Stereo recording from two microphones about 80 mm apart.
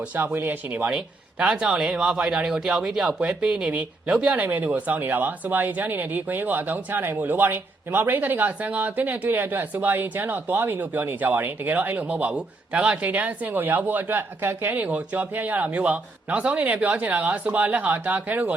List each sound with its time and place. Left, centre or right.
0.2 s speech: right